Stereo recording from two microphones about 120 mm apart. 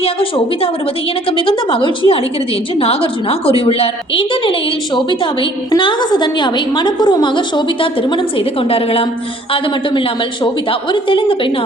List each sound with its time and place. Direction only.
0.0 s a woman's voice: 50° left (ahead or behind)
10.4 s a woman's voice: 45° left (ahead or behind)